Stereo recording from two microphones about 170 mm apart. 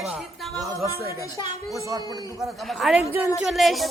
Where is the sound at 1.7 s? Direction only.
20° right (ahead or behind).